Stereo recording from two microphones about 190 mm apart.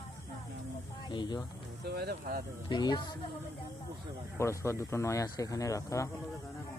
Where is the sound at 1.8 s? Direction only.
60° right (ahead or behind).